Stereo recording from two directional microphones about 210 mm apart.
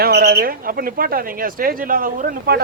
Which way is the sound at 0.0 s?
45° right (ahead or behind).